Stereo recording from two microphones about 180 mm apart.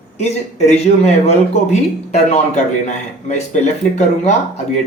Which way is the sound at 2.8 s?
40° left (ahead or behind).